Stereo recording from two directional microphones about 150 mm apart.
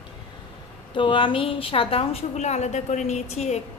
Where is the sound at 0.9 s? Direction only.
35° left (ahead or behind).